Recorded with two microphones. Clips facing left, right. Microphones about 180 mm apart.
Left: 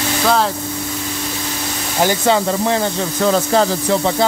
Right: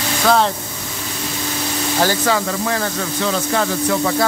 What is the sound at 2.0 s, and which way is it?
Speech, 25° left (ahead or behind).